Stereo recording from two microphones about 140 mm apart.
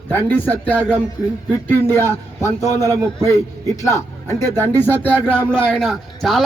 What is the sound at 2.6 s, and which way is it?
Speech, 25° right (ahead or behind).